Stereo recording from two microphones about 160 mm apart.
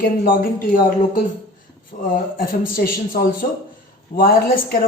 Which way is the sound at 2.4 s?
65° left (ahead or behind).